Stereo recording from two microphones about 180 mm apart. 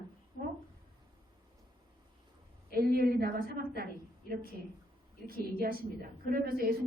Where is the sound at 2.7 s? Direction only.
60° right (ahead or behind).